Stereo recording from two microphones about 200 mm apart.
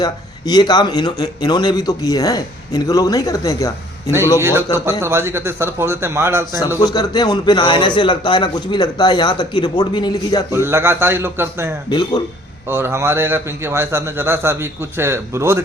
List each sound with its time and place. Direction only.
0.0 s a man's voice: 20° left (ahead or behind)
4.4 s a man's voice: 15° right (ahead or behind)
6.6 s a man's voice: 20° left (ahead or behind)
10.5 s a man's voice: 10° right (ahead or behind)
11.9 s a man's voice: 20° left (ahead or behind)
12.7 s a man's voice: 15° right (ahead or behind)